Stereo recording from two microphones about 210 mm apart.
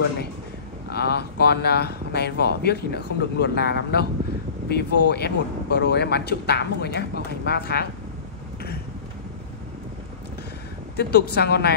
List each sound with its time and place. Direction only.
0.9 s speech: 50° left (ahead or behind)
11.0 s speech: 50° left (ahead or behind)